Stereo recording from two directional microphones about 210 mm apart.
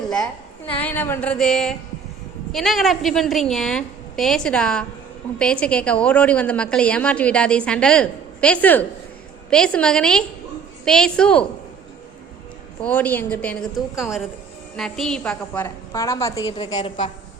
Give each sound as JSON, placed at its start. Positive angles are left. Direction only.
{"t": 0.7, "sound": "a woman's voice", "side_deg": 10}
{"t": 12.8, "sound": "a woman's voice", "side_deg": 5}